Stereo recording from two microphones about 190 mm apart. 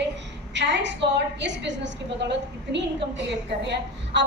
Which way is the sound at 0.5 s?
70° right (ahead or behind).